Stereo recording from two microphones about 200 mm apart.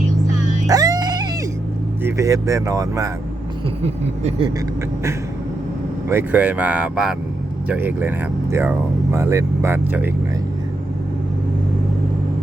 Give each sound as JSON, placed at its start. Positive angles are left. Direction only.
{"t": 0.7, "sound": "music", "side_deg": -20}
{"t": 2.0, "sound": "speech", "side_deg": -15}
{"t": 3.8, "sound": "speech", "side_deg": -30}
{"t": 6.1, "sound": "speech", "side_deg": -10}
{"t": 9.1, "sound": "speech", "side_deg": -15}